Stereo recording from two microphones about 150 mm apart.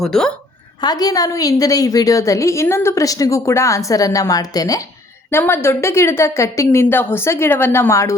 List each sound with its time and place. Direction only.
0.0 s a woman's voice: 5° left (ahead or behind)
0.8 s a woman's voice: 25° left (ahead or behind)